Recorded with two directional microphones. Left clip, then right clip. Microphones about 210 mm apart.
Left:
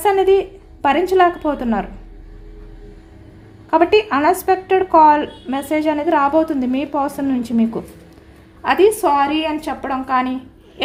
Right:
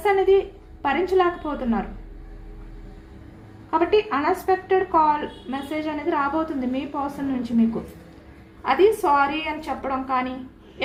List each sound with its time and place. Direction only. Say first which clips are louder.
0.0 s a woman's voice: left 4 dB; 55° left (ahead or behind)
3.7 s speech: left 6 dB; 55° left (ahead or behind)
8.6 s a woman's voice: left 5 dB; 55° left (ahead or behind)